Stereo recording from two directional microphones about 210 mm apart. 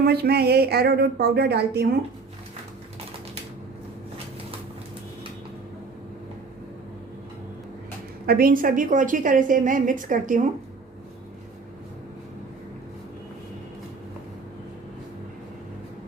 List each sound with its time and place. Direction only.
0.0 s a woman's voice: 50° right (ahead or behind)
8.3 s a woman's voice: 45° right (ahead or behind)